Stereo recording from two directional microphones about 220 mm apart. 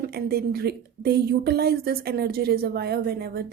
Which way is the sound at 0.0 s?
45° right (ahead or behind).